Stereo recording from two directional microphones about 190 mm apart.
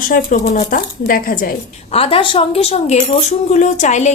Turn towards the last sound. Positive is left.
turn(degrees=40)  # may be behind; listen again after turning